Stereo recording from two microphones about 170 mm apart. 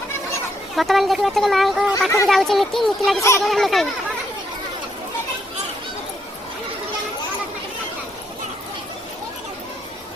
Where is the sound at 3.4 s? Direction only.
Centre (ahead or behind).